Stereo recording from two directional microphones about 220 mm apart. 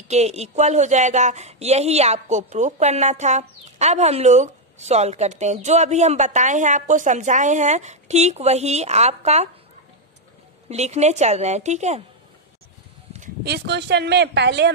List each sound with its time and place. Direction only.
0.1 s a woman's voice: 30° right (ahead or behind)
10.7 s a woman's voice: 30° right (ahead or behind)
13.4 s speech: 50° right (ahead or behind)